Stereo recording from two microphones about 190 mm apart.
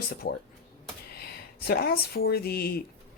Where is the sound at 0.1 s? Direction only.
50° left (ahead or behind).